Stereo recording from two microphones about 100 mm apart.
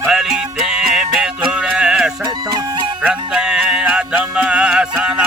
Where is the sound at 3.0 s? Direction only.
10° right (ahead or behind).